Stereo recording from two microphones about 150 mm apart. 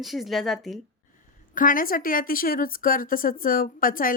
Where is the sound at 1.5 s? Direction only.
65° left (ahead or behind).